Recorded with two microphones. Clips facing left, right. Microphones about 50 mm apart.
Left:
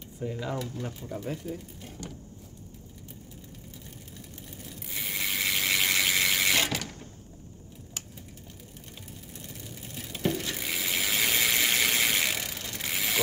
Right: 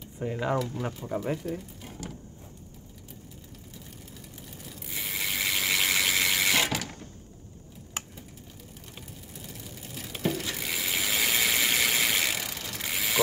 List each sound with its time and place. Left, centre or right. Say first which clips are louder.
0.2 s speech: right 4 dB; right
0.6 s speech: right 4 dB; centre
1.0 s speech: right 6 dB; right
1.8 s mechanisms: right 1 dB; centre
4.4 s ratchet: even; centre
8.0 s typing: right 6 dB; right
9.3 s vehicle: even; centre
10.1 s ratchet: even; centre